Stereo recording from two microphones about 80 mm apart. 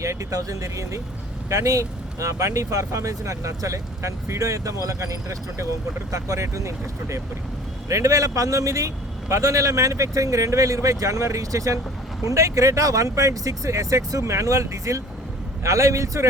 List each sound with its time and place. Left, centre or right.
0.0 s speech: right